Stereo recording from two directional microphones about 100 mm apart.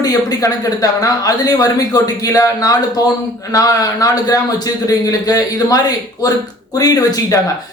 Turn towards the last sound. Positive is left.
turn(degrees=35)  # may be behind; listen again after turning